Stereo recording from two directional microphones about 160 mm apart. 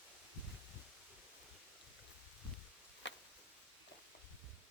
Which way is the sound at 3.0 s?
90° left.